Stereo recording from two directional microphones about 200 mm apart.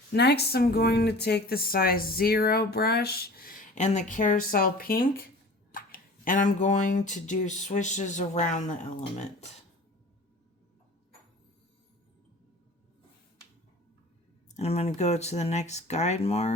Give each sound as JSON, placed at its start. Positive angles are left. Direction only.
{"t": 0.1, "sound": "speech", "side_deg": 55}
{"t": 14.5, "sound": "speech", "side_deg": 30}